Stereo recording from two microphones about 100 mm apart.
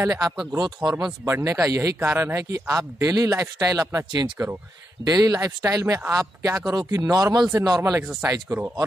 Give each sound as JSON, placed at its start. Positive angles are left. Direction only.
{"t": 0.0, "sound": "speech", "side_deg": -30}